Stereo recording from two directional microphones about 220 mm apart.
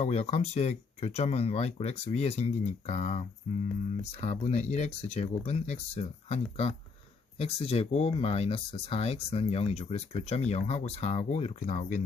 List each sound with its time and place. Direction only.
0.0 s speech: 30° left (ahead or behind)